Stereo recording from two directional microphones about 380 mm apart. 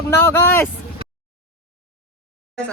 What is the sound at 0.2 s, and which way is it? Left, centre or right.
Speech, centre.